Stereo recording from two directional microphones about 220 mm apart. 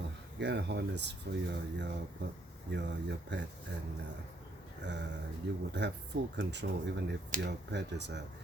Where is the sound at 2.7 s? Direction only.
55° right (ahead or behind).